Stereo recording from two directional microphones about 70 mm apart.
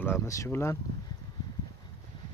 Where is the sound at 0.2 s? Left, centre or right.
Left.